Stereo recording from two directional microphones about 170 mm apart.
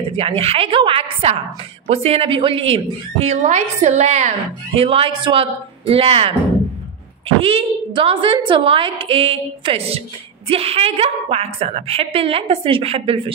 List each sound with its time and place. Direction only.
0.1 s a woman's voice: 35° right (ahead or behind)